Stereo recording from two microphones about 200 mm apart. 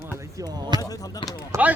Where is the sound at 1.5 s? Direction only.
10° right (ahead or behind).